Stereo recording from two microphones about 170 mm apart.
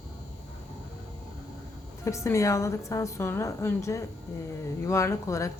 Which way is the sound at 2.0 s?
15° left (ahead or behind).